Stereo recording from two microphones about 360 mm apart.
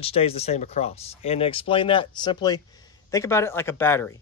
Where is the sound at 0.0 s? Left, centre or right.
Centre.